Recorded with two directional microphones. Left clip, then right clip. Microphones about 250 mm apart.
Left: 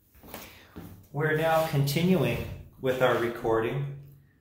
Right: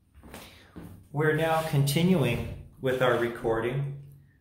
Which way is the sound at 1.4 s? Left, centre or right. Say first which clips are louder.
Left 2 dB; centre.